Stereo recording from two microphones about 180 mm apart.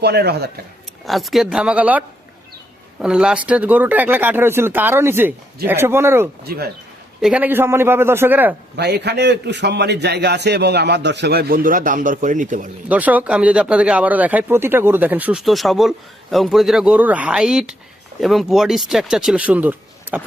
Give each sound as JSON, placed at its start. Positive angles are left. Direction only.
{"t": 0.0, "sound": "a man's voice", "side_deg": -65}
{"t": 1.0, "sound": "speech", "side_deg": 0}
{"t": 6.5, "sound": "speech", "side_deg": -55}
{"t": 7.2, "sound": "speech", "side_deg": -5}
{"t": 8.7, "sound": "a man's voice", "side_deg": -65}
{"t": 12.9, "sound": "speech", "side_deg": -10}